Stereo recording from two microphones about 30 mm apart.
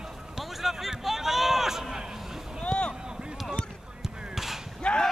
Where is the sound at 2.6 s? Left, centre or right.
Left.